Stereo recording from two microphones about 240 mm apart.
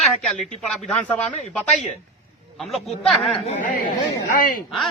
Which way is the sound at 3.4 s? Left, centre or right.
Left.